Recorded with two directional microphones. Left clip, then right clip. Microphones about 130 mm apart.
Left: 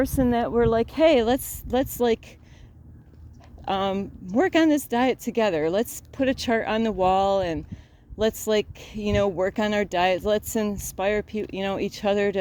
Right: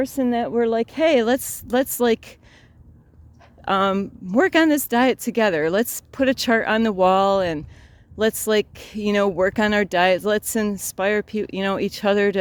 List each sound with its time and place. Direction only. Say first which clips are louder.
0.0 s speech: right 1 dB; 35° right (ahead or behind); by 2.3 s 80° right
3.7 s speech: right 5 dB; 85° right